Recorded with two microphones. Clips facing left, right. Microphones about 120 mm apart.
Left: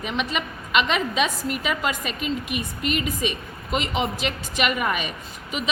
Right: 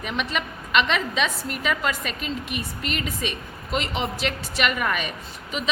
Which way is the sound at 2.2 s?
40° right (ahead or behind).